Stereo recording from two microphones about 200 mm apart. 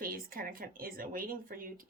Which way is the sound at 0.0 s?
45° right (ahead or behind).